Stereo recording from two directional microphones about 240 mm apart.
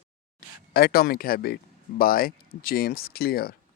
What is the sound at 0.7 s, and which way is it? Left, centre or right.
Speech, left.